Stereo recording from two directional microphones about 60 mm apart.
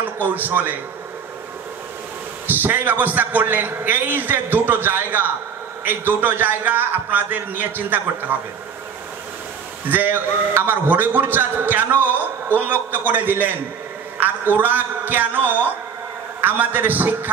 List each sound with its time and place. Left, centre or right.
0.0 s a man's voice: right
2.4 s a man's voice: right
9.8 s a man's voice: right